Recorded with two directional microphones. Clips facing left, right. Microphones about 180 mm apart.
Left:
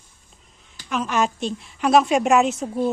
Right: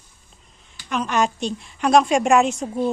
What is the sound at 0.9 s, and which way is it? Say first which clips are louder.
A woman's voice: right 1 dB; centre (ahead or behind).